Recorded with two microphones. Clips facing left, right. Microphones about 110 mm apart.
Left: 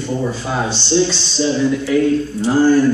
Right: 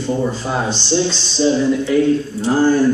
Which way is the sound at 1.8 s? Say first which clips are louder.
Even; centre (ahead or behind).